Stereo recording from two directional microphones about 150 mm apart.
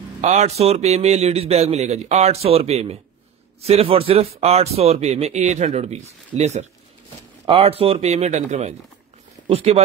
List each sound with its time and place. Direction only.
0.2 s speech: 50° right (ahead or behind)